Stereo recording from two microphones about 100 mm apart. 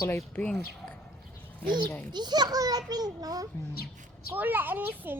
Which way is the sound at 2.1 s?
45° right (ahead or behind).